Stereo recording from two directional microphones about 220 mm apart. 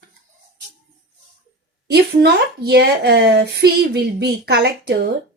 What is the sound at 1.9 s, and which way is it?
Speech, 50° right (ahead or behind).